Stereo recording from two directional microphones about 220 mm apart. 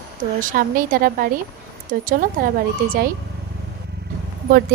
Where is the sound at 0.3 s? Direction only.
40° right (ahead or behind).